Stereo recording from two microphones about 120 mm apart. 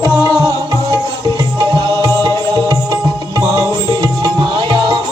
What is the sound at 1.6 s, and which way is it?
Music, 45° right (ahead or behind).